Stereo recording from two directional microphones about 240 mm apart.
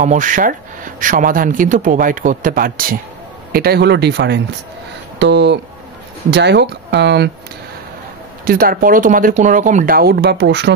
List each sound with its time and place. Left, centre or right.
0.0 s speech: right
8.5 s speech: right